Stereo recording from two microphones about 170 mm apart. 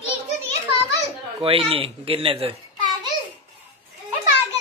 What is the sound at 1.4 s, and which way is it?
Speech, 35° right (ahead or behind).